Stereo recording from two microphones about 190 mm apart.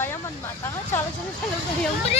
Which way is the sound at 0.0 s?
15° left (ahead or behind).